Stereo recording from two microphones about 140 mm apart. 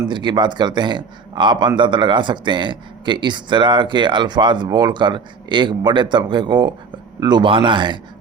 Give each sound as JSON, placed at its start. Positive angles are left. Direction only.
{"t": 0.1, "sound": "speech", "side_deg": -35}